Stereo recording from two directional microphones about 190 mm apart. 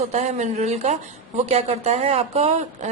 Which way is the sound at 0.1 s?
35° right (ahead or behind).